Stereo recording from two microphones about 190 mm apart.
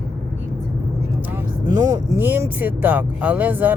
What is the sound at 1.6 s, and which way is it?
Speech, 20° right (ahead or behind).